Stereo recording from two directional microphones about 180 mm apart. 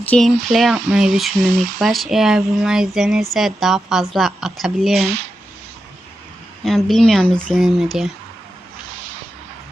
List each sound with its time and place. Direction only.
0.0 s a woman's voice: 5° left (ahead or behind)
4.9 s speech: 35° right (ahead or behind)
6.7 s a woman's voice: centre (ahead or behind)